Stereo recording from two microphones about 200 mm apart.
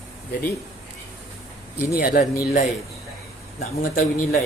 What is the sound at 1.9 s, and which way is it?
Speech, 45° left (ahead or behind).